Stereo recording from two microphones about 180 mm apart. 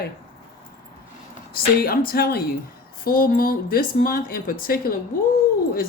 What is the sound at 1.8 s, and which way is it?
A woman's voice, 55° left (ahead or behind).